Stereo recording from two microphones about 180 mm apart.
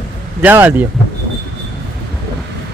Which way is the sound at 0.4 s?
10° right (ahead or behind).